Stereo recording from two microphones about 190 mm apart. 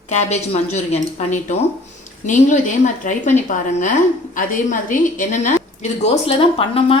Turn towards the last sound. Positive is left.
turn(degrees=30)  # may be behind; listen again after turning